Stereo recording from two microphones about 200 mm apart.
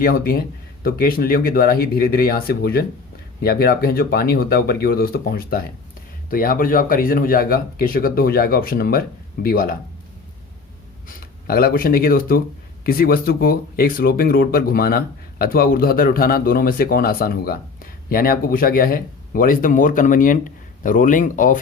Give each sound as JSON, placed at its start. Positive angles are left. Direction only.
{"t": 0.0, "sound": "speech", "side_deg": 50}
{"t": 11.4, "sound": "speech", "side_deg": 50}